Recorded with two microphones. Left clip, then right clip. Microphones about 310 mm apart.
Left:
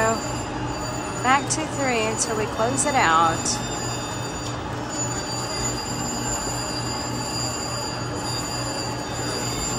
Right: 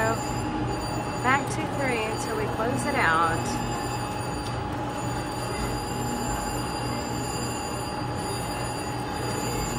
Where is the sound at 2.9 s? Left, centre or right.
Centre.